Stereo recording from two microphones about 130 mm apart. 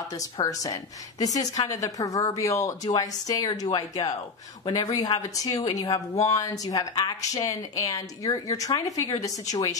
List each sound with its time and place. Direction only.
0.4 s speech: 25° left (ahead or behind)